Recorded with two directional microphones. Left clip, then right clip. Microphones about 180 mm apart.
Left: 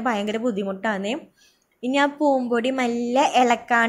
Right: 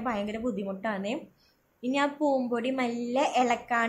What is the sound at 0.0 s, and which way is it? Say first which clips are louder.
A woman's voice: left 8 dB; 30° left (ahead or behind).